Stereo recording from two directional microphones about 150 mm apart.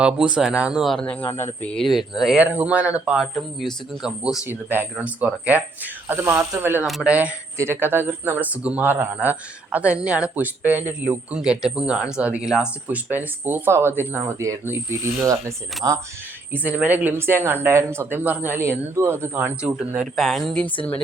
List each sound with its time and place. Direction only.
0.0 s speech: 5° right (ahead or behind)
6.8 s speech: 5° right (ahead or behind); by 16.0 s 20° right (ahead or behind)
16.5 s speech: 10° right (ahead or behind)